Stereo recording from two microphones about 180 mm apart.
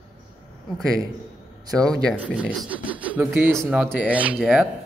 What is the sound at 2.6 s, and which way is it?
Speech, 10° right (ahead or behind).